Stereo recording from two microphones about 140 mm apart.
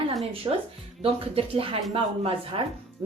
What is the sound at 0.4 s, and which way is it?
Speech, 30° right (ahead or behind).